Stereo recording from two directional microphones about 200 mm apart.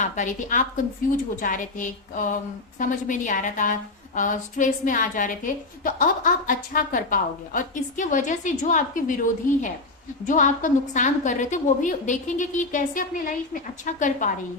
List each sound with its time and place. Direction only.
0.0 s a woman's voice: 40° left (ahead or behind)